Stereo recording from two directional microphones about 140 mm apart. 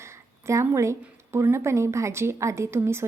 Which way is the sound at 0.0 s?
20° right (ahead or behind).